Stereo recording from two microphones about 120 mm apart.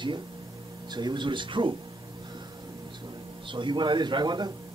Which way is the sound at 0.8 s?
35° right (ahead or behind).